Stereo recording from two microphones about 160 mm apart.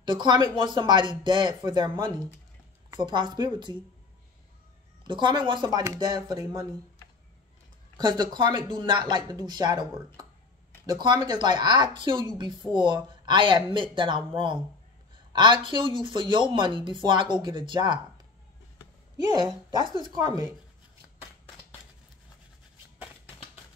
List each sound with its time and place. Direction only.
0.0 s speech: 30° right (ahead or behind)
5.0 s speech: 30° right (ahead or behind)
8.0 s speech: 25° right (ahead or behind)